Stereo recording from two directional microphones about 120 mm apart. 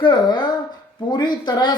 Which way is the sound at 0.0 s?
40° left (ahead or behind).